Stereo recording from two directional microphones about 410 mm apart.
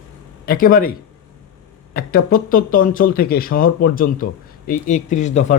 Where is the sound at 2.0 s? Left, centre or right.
Left.